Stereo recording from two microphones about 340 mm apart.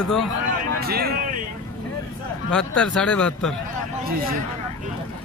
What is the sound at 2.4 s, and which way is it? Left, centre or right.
A man's voice, centre.